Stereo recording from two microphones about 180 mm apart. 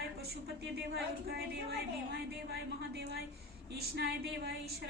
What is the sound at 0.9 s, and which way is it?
Speech, 60° right (ahead or behind).